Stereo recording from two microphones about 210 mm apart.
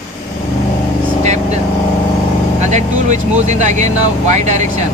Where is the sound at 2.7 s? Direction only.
35° right (ahead or behind).